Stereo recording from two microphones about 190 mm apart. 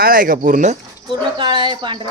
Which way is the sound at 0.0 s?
45° right (ahead or behind).